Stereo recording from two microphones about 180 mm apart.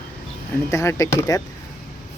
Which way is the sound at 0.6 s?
15° left (ahead or behind).